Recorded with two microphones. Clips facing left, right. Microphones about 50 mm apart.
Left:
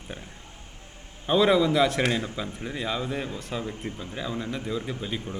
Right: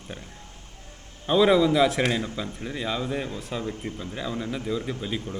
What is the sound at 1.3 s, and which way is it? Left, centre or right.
Speech, centre.